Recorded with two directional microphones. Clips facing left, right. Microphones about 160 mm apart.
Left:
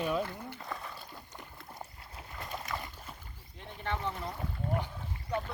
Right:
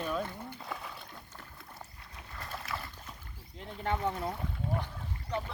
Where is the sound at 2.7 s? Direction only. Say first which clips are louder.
Left 1 dB; 5° right (ahead or behind).